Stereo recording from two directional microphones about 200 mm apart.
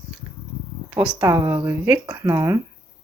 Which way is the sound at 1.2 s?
20° right (ahead or behind).